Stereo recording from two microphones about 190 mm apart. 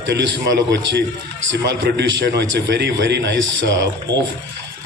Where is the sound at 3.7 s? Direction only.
20° right (ahead or behind).